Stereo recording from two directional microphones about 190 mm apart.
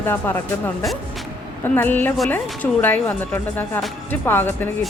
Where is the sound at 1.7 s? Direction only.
10° left (ahead or behind).